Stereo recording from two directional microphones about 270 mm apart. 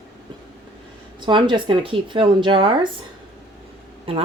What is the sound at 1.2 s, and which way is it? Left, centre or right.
Speech, centre.